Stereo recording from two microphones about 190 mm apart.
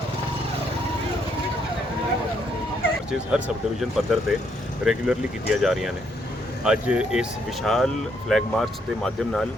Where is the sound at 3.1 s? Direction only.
5° right (ahead or behind).